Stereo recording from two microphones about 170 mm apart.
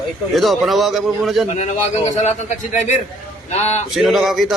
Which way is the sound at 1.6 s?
45° left (ahead or behind).